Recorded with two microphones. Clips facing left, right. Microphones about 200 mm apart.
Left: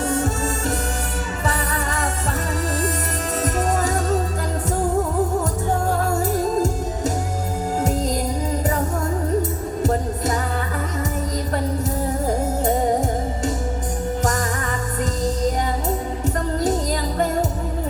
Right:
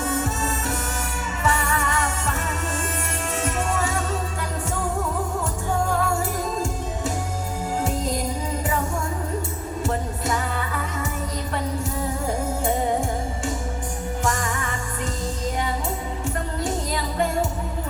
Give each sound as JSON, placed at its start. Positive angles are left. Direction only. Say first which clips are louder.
{"t": 0.0, "sound": "music", "louder": "left 3 dB", "side_deg": 35}
{"t": 3.4, "sound": "music", "louder": "left 4 dB", "side_deg": 40}
{"t": 7.8, "sound": "music", "louder": "left 3 dB", "side_deg": 40}
{"t": 9.8, "sound": "music", "louder": "left 5 dB", "side_deg": 40}
{"t": 12.6, "sound": "music", "louder": "left 3 dB", "side_deg": 40}